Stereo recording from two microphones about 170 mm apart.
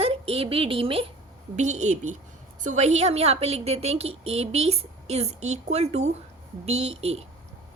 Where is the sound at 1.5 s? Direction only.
45° right (ahead or behind).